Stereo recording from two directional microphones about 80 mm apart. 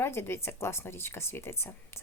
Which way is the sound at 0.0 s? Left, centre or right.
Left.